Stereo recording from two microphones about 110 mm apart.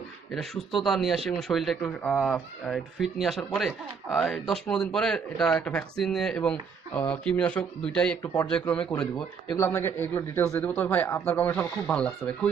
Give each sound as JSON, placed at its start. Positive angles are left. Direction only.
{"t": 0.3, "sound": "speech", "side_deg": 5}
{"t": 8.2, "sound": "speech", "side_deg": 35}
{"t": 8.4, "sound": "speech", "side_deg": 10}
{"t": 9.6, "sound": "a man's voice", "side_deg": 25}